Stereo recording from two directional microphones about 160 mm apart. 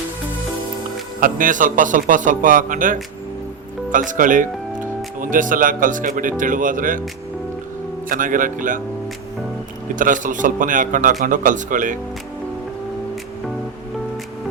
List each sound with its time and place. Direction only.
1.2 s a man's voice: 55° right (ahead or behind)
8.1 s a man's voice: 55° right (ahead or behind)
9.9 s a man's voice: 55° right (ahead or behind)